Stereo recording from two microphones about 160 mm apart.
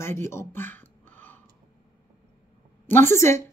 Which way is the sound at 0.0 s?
15° left (ahead or behind).